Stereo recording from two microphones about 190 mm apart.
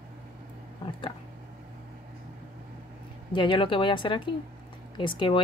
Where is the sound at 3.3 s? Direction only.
25° left (ahead or behind).